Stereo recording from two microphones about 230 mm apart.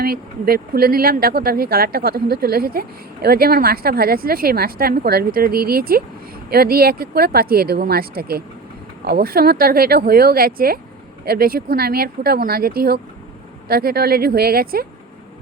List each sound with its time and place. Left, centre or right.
0.0 s speech: right